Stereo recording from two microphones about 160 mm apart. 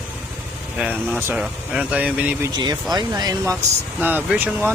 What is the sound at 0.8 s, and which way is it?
Speech, 5° right (ahead or behind).